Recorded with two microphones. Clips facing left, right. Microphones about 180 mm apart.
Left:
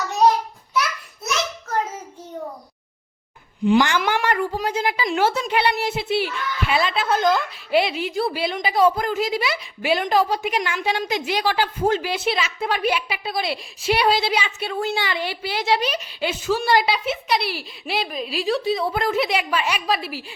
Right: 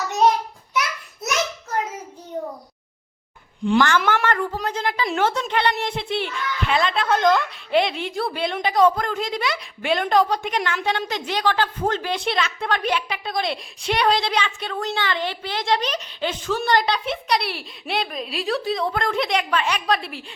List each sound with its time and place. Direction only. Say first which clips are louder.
3.8 s a woman's voice: right 4 dB; 15° left (ahead or behind)